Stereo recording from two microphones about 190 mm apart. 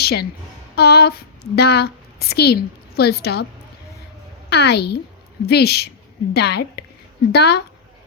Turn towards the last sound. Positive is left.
turn(degrees=60)  # may be behind; listen again after turning